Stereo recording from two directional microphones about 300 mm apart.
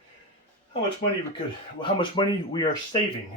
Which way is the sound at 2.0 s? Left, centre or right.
Centre.